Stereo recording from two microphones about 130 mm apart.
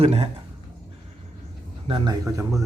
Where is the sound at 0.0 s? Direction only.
50° right (ahead or behind).